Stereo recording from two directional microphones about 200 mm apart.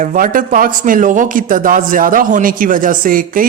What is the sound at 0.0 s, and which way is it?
A man's voice, 45° right (ahead or behind).